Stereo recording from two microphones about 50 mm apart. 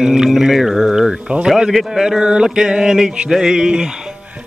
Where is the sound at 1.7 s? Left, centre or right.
Centre.